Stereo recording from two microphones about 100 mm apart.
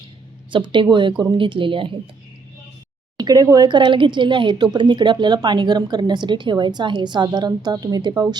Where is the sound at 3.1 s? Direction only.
40° right (ahead or behind).